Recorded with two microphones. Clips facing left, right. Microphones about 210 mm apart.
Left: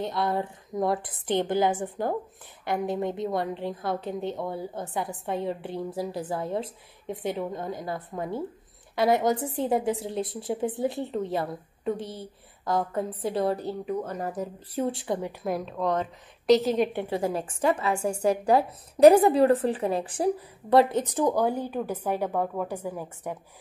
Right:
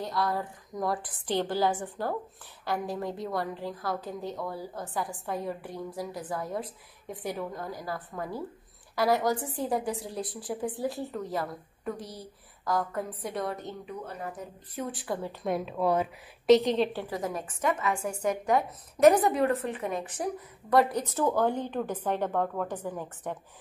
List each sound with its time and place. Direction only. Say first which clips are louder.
0.0 s a woman's voice: left 3 dB; 20° left (ahead or behind)
15.4 s a woman's voice: right 3 dB; centre (ahead or behind)
17.0 s a woman's voice: left 5 dB; 30° left (ahead or behind)
21.1 s a woman's voice: left 2 dB; 15° left (ahead or behind)